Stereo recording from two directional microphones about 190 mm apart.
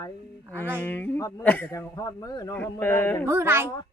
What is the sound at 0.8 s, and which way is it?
Speech, 10° left (ahead or behind).